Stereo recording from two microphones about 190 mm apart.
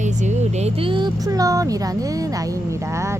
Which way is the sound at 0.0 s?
40° right (ahead or behind).